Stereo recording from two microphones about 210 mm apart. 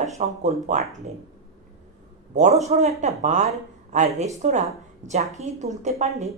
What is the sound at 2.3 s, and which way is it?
Speech, 35° right (ahead or behind).